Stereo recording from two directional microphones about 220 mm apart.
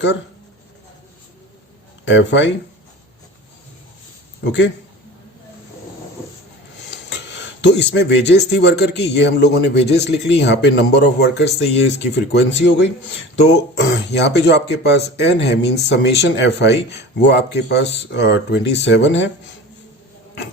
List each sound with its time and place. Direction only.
2.0 s speech: 55° left (ahead or behind)
7.6 s a man's voice: 50° left (ahead or behind)